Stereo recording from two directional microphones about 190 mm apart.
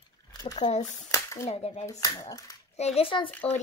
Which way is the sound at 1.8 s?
20° left (ahead or behind).